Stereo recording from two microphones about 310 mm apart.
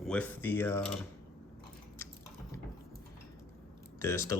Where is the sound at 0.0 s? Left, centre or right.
Centre.